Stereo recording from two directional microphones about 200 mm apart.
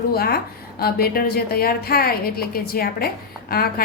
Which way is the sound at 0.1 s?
50° left (ahead or behind).